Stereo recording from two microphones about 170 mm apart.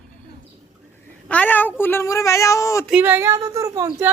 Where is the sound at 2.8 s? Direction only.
5° right (ahead or behind).